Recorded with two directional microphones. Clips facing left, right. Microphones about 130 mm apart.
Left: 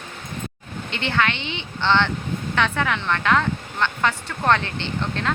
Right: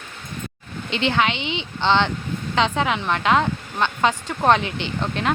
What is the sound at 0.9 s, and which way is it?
Speech, 20° right (ahead or behind).